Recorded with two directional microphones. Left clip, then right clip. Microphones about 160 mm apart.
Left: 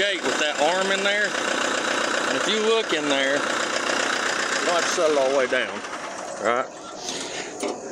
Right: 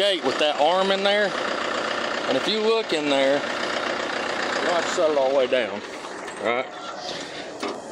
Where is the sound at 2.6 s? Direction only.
20° right (ahead or behind).